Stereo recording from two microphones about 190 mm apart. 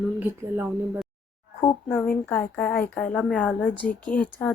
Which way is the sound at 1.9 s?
10° left (ahead or behind).